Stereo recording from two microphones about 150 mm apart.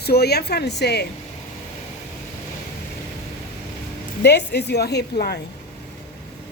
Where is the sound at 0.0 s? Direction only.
90° left.